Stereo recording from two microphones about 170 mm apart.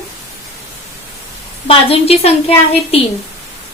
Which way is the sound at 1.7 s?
35° left (ahead or behind).